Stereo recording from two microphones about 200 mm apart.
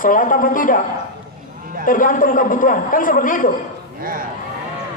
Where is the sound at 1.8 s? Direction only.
40° left (ahead or behind).